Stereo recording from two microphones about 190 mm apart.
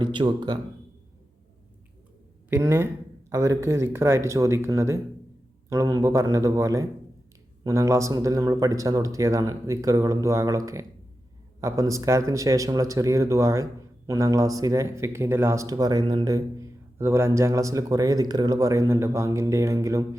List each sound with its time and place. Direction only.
0.0 s speech: 25° right (ahead or behind)
2.5 s speech: 15° right (ahead or behind)